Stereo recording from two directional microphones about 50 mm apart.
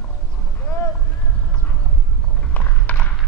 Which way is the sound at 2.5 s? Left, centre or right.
Left.